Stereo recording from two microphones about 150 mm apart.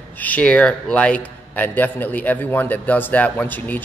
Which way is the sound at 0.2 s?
10° left (ahead or behind).